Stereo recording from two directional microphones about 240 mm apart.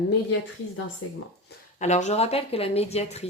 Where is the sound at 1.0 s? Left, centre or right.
Left.